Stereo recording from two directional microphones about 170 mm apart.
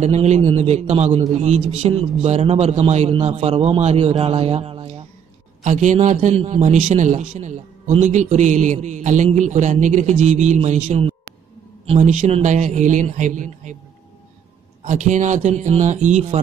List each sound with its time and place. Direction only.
0.0 s a man's voice: 40° right (ahead or behind)
14.9 s a man's voice: 45° right (ahead or behind)